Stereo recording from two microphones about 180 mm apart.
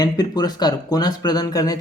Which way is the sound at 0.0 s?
20° left (ahead or behind).